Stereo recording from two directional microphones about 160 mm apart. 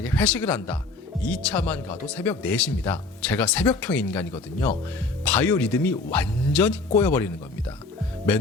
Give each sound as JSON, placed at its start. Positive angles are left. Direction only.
{"t": 0.0, "sound": "speech", "side_deg": 10}